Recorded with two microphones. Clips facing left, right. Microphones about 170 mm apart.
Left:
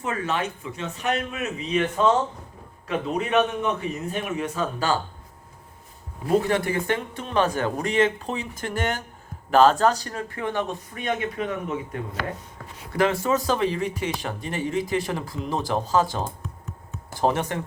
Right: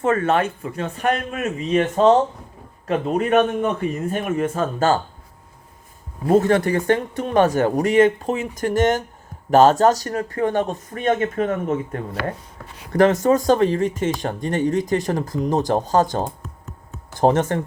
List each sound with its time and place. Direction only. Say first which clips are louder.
0.0 s speech: right 8 dB; 50° right (ahead or behind)
6.2 s speech: right 5 dB; 45° right (ahead or behind)
17.2 s speech: right 6 dB; 20° right (ahead or behind)